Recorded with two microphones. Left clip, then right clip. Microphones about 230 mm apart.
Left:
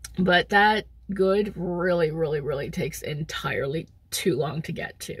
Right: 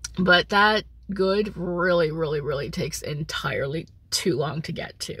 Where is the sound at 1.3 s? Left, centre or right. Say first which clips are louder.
Even; right.